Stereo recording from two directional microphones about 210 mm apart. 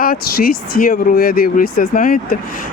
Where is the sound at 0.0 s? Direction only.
45° left (ahead or behind).